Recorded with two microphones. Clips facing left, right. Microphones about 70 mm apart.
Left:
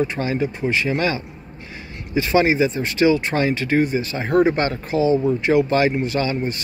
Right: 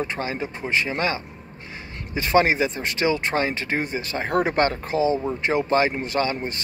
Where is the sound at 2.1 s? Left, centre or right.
Right.